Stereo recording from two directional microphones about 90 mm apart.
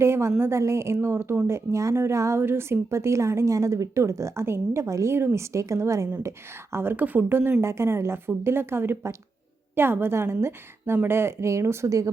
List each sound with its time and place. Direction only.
0.0 s a woman's voice: 30° right (ahead or behind)